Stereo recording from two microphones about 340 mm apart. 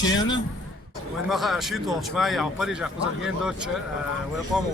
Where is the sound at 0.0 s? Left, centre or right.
Left.